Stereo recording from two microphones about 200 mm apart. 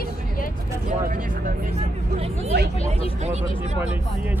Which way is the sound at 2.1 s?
30° right (ahead or behind).